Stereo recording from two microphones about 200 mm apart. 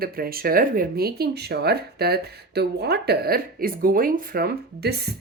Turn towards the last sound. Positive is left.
turn(degrees=-55)  # may be behind; listen again after turning